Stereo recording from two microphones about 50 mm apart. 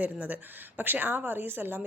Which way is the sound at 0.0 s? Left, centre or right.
Right.